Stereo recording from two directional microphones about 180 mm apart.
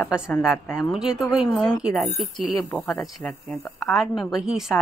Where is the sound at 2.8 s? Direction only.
15° left (ahead or behind).